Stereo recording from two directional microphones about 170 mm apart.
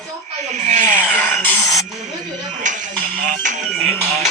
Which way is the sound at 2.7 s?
45° right (ahead or behind).